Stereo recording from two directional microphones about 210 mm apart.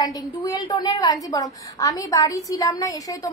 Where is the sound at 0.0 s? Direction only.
15° left (ahead or behind).